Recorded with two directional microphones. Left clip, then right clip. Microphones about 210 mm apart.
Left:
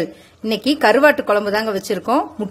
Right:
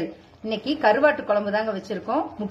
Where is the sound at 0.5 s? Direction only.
55° left (ahead or behind).